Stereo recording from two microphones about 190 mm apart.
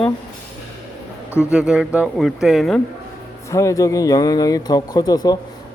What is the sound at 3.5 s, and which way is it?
A man's voice, 15° left (ahead or behind).